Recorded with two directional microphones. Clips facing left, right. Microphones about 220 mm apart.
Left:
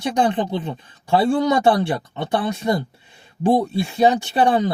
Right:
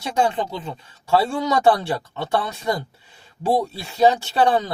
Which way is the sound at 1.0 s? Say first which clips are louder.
Left 3 dB; 15° left (ahead or behind).